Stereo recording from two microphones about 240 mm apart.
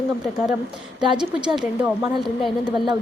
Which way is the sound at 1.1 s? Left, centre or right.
Centre.